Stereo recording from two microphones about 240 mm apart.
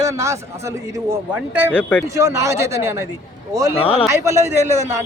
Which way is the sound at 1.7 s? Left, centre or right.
Centre.